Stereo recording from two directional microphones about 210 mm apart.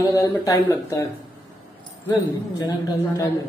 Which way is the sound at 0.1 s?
15° left (ahead or behind).